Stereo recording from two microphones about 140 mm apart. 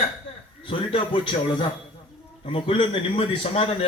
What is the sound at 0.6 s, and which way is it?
A man's voice, 40° left (ahead or behind).